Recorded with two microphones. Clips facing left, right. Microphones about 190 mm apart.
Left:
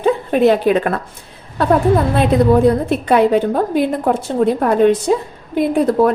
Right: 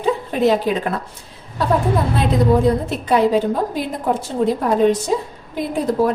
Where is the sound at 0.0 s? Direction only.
60° left (ahead or behind).